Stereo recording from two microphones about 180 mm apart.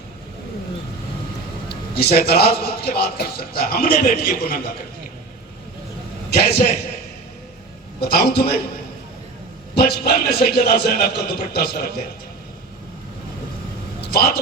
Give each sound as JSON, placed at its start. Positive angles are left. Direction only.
{"t": 1.7, "sound": "a man's voice", "side_deg": 60}
{"t": 6.3, "sound": "a man's voice", "side_deg": 60}
{"t": 8.0, "sound": "a man's voice", "side_deg": 60}
{"t": 9.7, "sound": "a man's voice", "side_deg": 60}
{"t": 14.0, "sound": "a sound", "side_deg": 55}